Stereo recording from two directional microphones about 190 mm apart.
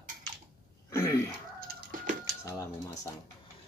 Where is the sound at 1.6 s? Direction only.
50° right (ahead or behind).